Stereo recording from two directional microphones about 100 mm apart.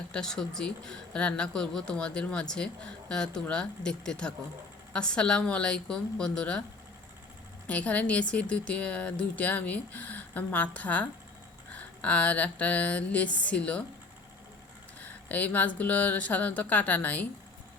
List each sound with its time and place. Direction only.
0.1 s speech: 5° left (ahead or behind)
7.7 s speech: 15° left (ahead or behind)
15.3 s speech: 15° left (ahead or behind)